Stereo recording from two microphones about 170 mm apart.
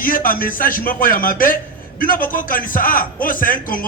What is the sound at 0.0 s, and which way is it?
A man's voice, 55° left (ahead or behind).